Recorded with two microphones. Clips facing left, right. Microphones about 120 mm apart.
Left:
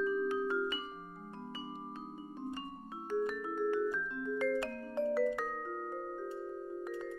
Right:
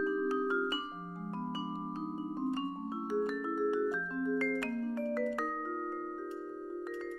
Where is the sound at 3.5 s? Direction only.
15° right (ahead or behind).